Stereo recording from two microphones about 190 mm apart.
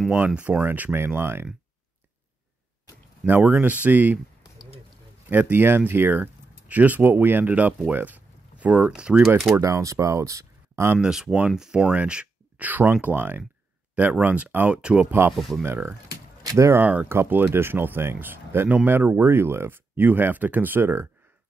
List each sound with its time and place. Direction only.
0.0 s speech: 5° right (ahead or behind)
3.3 s speech: 10° right (ahead or behind)
4.4 s a sound: 20° left (ahead or behind)
5.3 s speech: 10° right (ahead or behind)
9.6 s speech: 15° right (ahead or behind)
15.3 s speech: centre (ahead or behind)
15.6 s speech: 10° right (ahead or behind)